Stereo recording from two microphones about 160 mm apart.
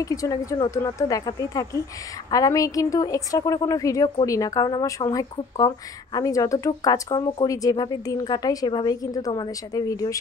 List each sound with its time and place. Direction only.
0.0 s speech: 20° left (ahead or behind)